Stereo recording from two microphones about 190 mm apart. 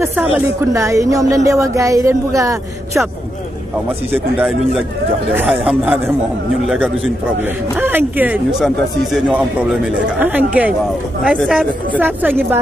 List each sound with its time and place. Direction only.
0.0 s a woman's voice: 15° right (ahead or behind)
4.1 s a woman's voice: 5° right (ahead or behind)
11.3 s speech: 5° left (ahead or behind)
12.0 s a woman's voice: 10° right (ahead or behind)